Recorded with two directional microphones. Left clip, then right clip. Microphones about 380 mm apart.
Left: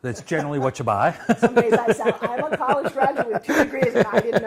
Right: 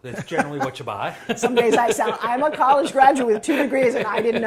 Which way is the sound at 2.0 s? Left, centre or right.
Right.